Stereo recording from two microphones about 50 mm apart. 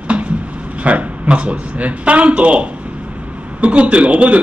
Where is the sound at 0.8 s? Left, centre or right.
Right.